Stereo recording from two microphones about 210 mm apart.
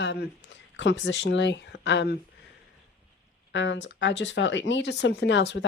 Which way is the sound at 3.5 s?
60° left (ahead or behind).